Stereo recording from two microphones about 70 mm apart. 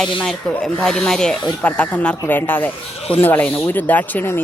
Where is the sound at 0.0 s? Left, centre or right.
Centre.